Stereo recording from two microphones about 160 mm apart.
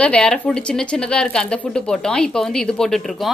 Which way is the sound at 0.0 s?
5° left (ahead or behind).